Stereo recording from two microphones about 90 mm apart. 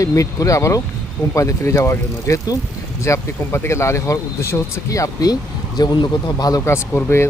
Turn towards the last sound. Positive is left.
turn(degrees=30)  # may be behind; listen again after turning